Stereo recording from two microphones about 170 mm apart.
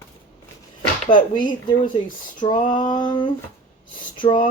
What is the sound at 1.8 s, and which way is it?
Speech, 50° left (ahead or behind).